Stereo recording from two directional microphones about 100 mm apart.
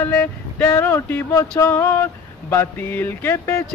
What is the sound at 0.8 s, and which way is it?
Speech, 20° left (ahead or behind).